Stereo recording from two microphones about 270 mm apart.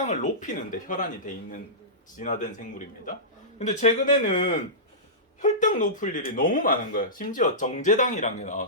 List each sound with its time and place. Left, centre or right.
0.0 s speech: left